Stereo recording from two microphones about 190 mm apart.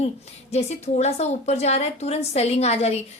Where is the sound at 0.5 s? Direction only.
35° left (ahead or behind).